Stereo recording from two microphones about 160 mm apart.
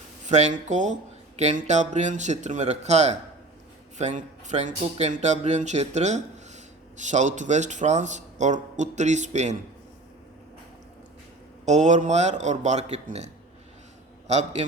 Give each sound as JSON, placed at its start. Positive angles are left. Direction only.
{"t": 0.3, "sound": "speech", "side_deg": -45}
{"t": 11.6, "sound": "speech", "side_deg": -45}